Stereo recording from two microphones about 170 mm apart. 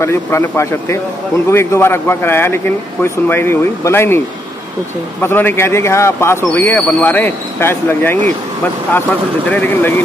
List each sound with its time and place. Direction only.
0.0 s speech: 15° left (ahead or behind)
5.2 s speech: 10° left (ahead or behind)
9.5 s speech: 10° left (ahead or behind)